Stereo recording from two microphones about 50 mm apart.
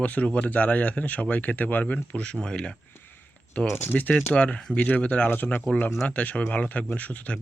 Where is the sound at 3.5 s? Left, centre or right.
Left.